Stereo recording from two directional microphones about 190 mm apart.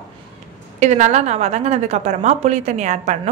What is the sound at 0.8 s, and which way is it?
A woman's voice, 35° right (ahead or behind).